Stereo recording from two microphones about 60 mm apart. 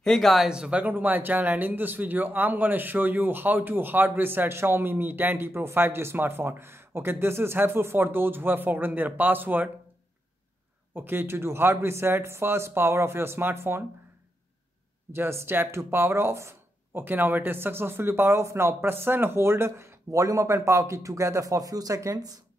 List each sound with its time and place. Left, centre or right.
0.0 s speech: centre
0.5 s speech: centre
0.7 s speech: right
11.0 s speech: right
15.1 s speech: right
17.0 s speech: right